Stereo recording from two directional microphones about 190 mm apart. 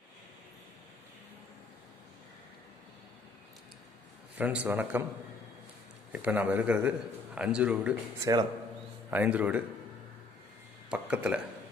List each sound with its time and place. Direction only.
4.4 s a man's voice: 10° right (ahead or behind)
6.1 s a man's voice: 10° right (ahead or behind)
8.2 s speech: 20° right (ahead or behind)
9.1 s a man's voice: 10° right (ahead or behind)
10.9 s speech: 5° right (ahead or behind)